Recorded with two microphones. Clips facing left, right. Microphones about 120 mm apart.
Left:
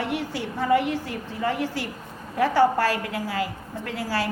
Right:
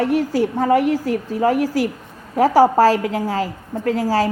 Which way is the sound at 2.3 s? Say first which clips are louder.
Right 8 dB; 90° right.